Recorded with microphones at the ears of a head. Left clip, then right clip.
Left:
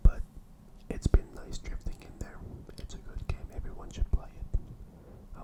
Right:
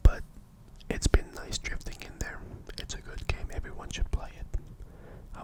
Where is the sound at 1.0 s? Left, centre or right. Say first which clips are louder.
Right 5 dB; right.